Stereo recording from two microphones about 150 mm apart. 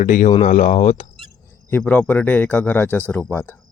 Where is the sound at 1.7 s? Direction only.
10° left (ahead or behind).